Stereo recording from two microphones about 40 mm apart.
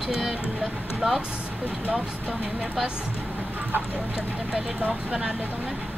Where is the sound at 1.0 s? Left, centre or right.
Centre.